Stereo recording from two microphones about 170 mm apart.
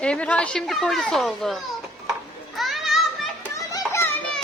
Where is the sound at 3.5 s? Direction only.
15° left (ahead or behind).